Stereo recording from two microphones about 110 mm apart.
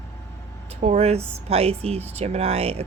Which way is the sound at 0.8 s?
75° right (ahead or behind).